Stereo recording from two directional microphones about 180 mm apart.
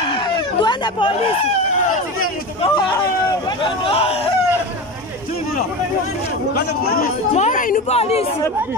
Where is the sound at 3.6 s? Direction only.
30° left (ahead or behind).